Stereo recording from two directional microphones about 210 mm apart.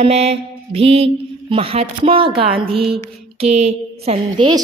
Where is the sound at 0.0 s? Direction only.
30° right (ahead or behind).